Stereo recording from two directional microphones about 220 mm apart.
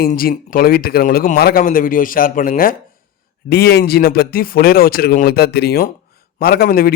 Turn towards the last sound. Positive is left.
turn(degrees=45)  # may be behind; listen again after turning